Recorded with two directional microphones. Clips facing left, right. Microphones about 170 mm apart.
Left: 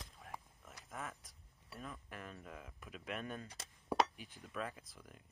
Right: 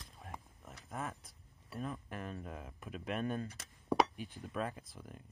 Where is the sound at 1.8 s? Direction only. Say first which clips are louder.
Right 7 dB; 35° right (ahead or behind).